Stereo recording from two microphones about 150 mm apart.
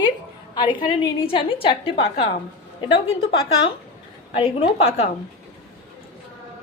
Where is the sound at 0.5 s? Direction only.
30° left (ahead or behind).